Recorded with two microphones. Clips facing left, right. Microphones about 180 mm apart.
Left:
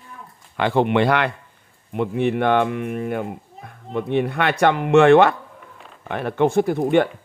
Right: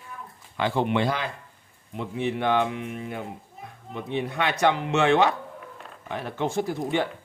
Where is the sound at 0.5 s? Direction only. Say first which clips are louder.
Left 6 dB; 65° left (ahead or behind).